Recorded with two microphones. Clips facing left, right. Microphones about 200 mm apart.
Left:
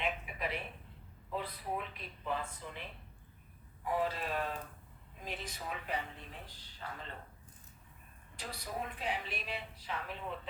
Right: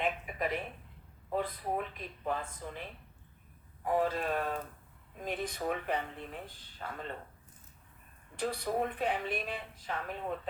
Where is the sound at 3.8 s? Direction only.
45° right (ahead or behind).